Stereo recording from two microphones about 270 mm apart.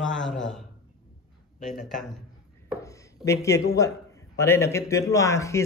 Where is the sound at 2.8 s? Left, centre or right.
Centre.